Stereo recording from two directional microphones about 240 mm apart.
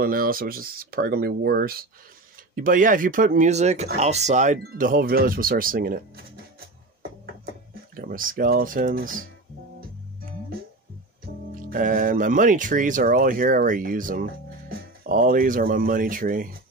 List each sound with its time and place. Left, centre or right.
0.0 s speech: right
7.9 s speech: right
11.3 s music: right
11.7 s speech: right